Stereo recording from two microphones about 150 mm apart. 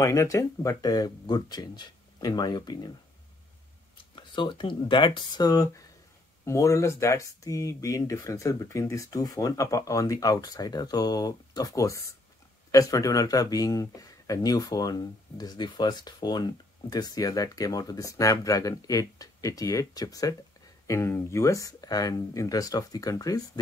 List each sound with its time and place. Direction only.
0.0 s speech: 20° left (ahead or behind)
4.0 s speech: 35° left (ahead or behind)